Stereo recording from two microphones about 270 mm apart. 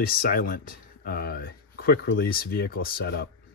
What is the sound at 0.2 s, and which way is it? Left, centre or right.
Speech, left.